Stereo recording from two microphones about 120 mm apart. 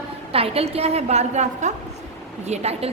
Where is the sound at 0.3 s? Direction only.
55° right (ahead or behind); by 1.7 s 75° right (ahead or behind).